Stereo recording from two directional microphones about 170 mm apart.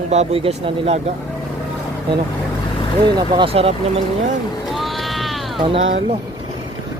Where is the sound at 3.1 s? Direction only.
30° right (ahead or behind).